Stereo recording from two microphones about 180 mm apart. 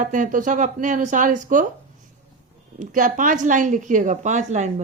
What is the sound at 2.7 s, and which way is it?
A woman's voice, 45° right (ahead or behind).